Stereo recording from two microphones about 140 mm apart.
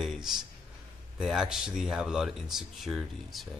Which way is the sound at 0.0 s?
Centre (ahead or behind).